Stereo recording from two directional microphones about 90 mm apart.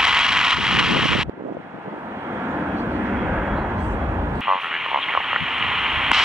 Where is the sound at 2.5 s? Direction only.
25° right (ahead or behind).